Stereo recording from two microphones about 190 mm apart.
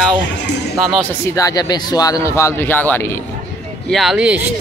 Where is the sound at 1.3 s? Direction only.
20° left (ahead or behind).